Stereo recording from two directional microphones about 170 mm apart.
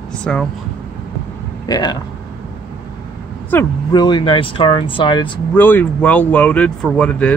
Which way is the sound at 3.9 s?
25° left (ahead or behind).